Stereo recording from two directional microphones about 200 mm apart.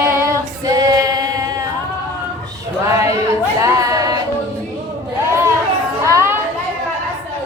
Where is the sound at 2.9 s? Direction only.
15° right (ahead or behind).